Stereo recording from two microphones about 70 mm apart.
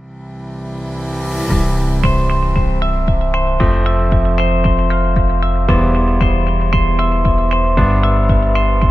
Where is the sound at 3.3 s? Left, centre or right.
Left.